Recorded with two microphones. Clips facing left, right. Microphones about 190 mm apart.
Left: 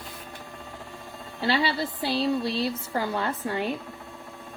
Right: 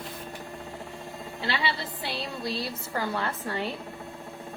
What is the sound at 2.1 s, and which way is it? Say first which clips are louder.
A woman's voice: left 8 dB; 30° left (ahead or behind).